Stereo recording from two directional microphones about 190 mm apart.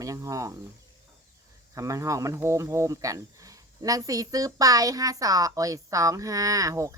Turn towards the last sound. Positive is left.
turn(degrees=-15)  # may be behind; listen again after turning